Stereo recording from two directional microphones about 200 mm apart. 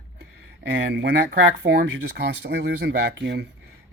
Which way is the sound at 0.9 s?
55° right (ahead or behind).